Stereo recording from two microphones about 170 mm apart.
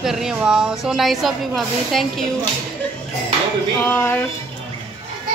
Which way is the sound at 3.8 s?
10° left (ahead or behind).